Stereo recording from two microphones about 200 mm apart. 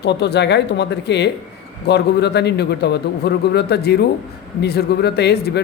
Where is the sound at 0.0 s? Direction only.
55° left (ahead or behind).